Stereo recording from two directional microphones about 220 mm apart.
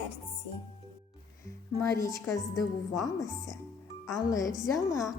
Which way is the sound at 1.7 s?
15° left (ahead or behind).